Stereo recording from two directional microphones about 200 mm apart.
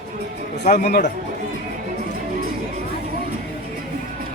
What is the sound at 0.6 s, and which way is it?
Speech, 35° left (ahead or behind).